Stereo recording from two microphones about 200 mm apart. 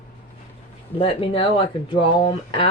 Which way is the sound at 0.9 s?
25° left (ahead or behind).